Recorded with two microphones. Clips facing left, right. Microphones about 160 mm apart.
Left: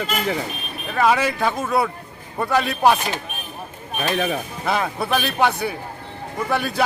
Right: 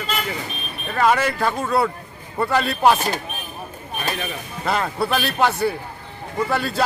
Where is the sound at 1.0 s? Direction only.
5° left (ahead or behind).